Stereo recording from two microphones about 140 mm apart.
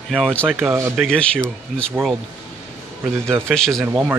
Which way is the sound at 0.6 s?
20° right (ahead or behind).